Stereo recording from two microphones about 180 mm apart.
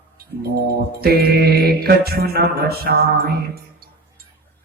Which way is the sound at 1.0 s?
60° right (ahead or behind).